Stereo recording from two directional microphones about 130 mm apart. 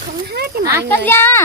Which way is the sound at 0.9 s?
15° left (ahead or behind).